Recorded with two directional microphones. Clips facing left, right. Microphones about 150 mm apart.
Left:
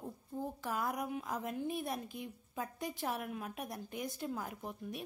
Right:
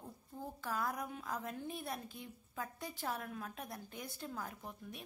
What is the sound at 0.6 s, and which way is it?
A woman's voice, 20° left (ahead or behind).